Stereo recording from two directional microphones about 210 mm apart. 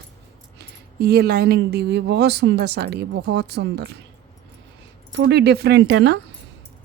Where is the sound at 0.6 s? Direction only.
50° right (ahead or behind).